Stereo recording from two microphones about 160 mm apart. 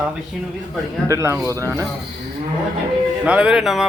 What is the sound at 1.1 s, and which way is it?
Speech, 20° right (ahead or behind).